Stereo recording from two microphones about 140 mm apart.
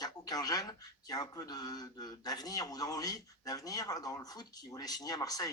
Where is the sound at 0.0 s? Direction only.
30° left (ahead or behind).